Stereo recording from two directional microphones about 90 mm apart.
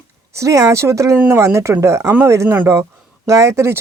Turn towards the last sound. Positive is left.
turn(degrees=-30)  # may be behind; listen again after turning